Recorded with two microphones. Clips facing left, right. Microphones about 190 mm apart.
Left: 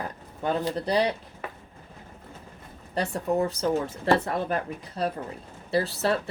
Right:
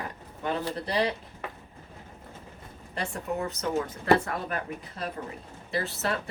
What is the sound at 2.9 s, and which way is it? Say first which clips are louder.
Speech: left 6 dB; 35° left (ahead or behind).